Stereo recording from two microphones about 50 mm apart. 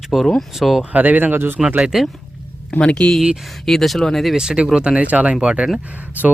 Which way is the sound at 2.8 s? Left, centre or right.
Left.